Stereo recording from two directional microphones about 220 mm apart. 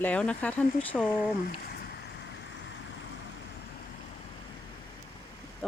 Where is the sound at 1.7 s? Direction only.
45° left (ahead or behind).